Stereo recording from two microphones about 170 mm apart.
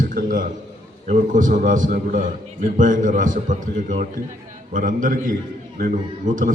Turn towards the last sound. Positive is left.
turn(degrees=-50)  # may be behind; listen again after turning